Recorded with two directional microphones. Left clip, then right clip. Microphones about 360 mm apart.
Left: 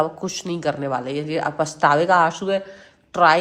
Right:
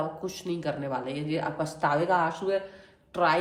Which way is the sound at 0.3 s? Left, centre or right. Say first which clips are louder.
Left 8 dB; left.